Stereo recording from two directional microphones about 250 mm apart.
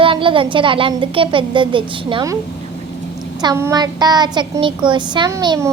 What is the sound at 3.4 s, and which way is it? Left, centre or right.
A woman's voice, centre.